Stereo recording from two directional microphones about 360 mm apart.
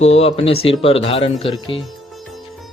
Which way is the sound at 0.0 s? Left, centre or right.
Centre.